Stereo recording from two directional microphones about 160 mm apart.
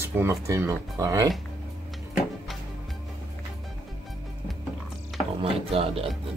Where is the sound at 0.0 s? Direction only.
15° right (ahead or behind).